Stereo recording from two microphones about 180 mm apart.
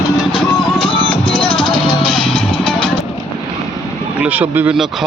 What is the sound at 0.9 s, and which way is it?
Music, 25° left (ahead or behind).